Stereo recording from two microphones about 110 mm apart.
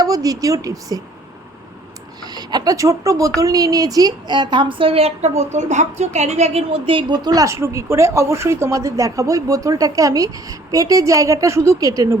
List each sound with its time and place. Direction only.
0.0 s a woman's voice: 35° right (ahead or behind)
2.2 s a woman's voice: 40° right (ahead or behind); by 5.3 s 70° right (ahead or behind)
5.4 s a woman's voice: 90° right; by 7.2 s 55° right (ahead or behind)
7.3 s speech: 30° right (ahead or behind)